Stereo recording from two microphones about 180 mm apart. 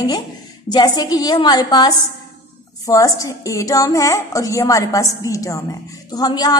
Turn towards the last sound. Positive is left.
turn(degrees=20)  # may be behind; listen again after turning